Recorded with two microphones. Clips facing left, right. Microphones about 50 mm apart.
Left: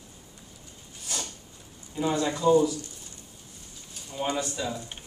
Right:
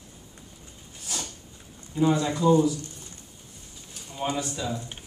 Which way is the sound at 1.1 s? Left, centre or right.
Centre.